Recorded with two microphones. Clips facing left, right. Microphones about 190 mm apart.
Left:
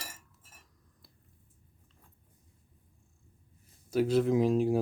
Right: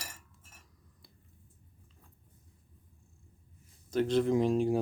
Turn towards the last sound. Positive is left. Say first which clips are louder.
# left 1 dB
turn(degrees=0)  # may be behind; listen again after turning